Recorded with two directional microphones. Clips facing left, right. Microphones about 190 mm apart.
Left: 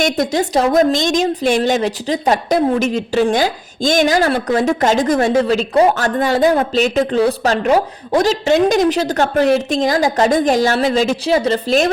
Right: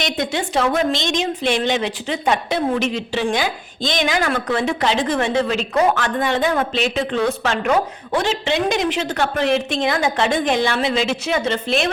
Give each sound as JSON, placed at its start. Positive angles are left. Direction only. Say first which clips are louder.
{"t": 0.0, "sound": "a woman's voice", "louder": "left 6 dB", "side_deg": 40}